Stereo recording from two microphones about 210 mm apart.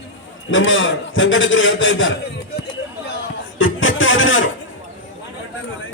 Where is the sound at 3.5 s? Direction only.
70° left (ahead or behind).